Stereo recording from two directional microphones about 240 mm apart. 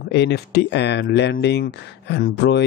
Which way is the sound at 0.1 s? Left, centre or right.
Left.